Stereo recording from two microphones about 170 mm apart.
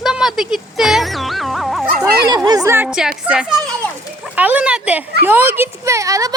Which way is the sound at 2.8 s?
5° right (ahead or behind).